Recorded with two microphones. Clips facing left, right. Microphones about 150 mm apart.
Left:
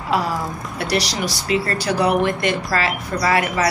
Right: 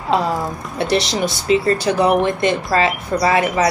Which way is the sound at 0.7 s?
25° right (ahead or behind).